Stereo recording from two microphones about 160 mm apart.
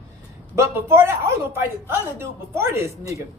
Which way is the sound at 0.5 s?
15° right (ahead or behind).